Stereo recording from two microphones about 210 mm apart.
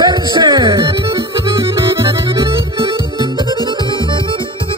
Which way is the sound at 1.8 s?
15° right (ahead or behind).